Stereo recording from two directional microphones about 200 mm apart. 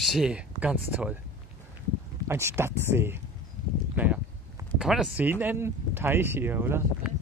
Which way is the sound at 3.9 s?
10° right (ahead or behind).